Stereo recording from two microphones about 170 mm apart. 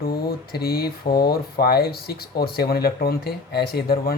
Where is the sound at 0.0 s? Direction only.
60° left (ahead or behind).